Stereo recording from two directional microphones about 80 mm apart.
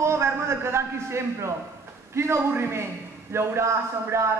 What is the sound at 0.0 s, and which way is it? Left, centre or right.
A man's voice, right.